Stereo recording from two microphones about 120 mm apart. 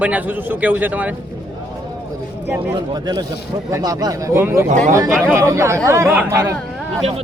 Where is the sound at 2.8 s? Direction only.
35° right (ahead or behind).